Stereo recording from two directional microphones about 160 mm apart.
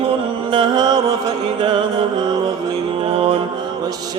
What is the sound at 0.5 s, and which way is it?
Mantra, 25° right (ahead or behind).